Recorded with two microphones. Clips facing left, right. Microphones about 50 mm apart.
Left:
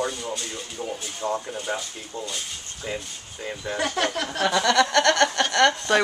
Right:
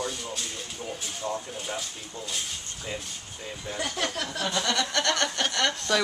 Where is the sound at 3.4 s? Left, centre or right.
Left.